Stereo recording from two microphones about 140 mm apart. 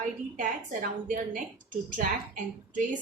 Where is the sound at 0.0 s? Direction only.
75° right (ahead or behind).